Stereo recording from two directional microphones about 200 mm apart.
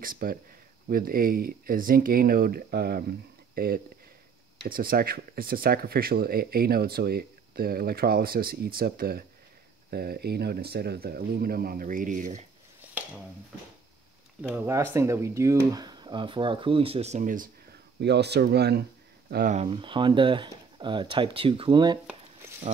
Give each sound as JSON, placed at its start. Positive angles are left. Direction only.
{"t": 0.0, "sound": "speech", "side_deg": -45}
{"t": 12.8, "sound": "a sound", "side_deg": -10}
{"t": 14.5, "sound": "speech", "side_deg": -10}
{"t": 18.0, "sound": "speech", "side_deg": -55}
{"t": 19.5, "sound": "speech", "side_deg": -30}